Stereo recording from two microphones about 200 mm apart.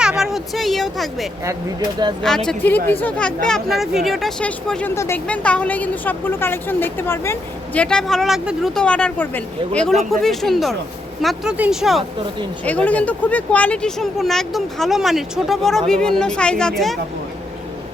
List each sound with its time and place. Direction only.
0.0 s speech: 5° right (ahead or behind)